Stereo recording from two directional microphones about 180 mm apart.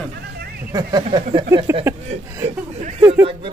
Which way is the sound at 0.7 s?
20° right (ahead or behind).